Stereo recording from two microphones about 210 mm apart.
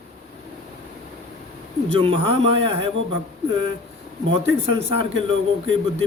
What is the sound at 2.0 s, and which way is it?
A man's voice, 25° right (ahead or behind).